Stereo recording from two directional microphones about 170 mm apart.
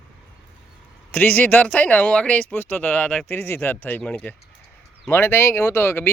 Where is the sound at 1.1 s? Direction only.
10° left (ahead or behind).